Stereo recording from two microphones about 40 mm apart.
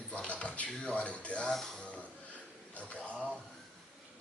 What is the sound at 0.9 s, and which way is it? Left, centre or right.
Speech, left.